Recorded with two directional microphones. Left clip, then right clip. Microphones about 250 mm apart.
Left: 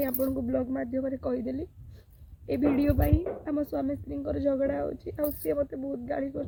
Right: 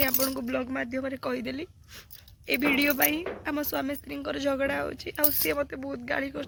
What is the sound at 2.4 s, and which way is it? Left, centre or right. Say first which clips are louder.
Speech: right 2 dB; right.